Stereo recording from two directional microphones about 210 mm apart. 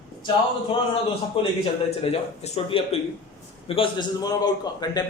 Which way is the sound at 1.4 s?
25° left (ahead or behind).